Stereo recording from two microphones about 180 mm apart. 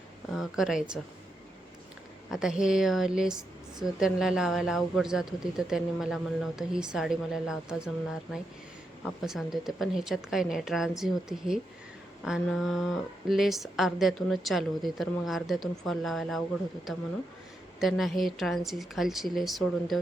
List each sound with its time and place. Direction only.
0.3 s a woman's voice: centre (ahead or behind)
2.3 s speech: centre (ahead or behind)